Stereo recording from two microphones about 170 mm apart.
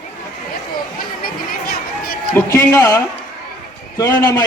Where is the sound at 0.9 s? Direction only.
60° left (ahead or behind).